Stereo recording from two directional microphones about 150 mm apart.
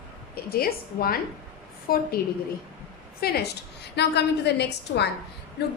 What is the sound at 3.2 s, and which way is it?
A woman's voice, 90° left.